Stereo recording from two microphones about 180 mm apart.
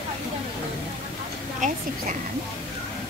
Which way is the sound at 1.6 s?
45° right (ahead or behind).